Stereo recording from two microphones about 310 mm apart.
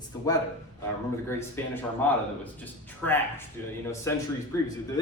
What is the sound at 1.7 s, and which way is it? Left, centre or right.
A man's voice, centre.